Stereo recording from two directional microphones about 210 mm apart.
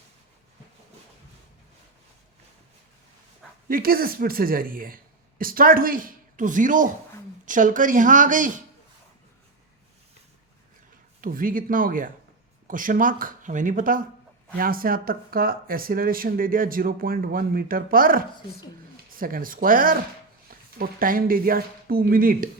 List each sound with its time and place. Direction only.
3.7 s speech: 45° right (ahead or behind)
11.2 s speech: 40° right (ahead or behind)